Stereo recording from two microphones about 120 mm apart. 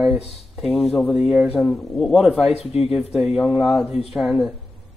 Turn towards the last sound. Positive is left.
turn(degrees=0)  # may be behind; listen again after turning